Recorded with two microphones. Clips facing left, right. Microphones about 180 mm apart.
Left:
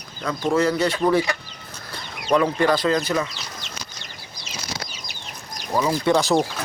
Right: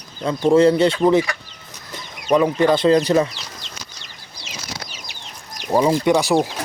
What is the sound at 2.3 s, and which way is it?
Speech, 20° right (ahead or behind).